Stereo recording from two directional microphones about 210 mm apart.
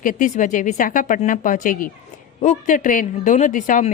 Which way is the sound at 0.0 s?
40° left (ahead or behind).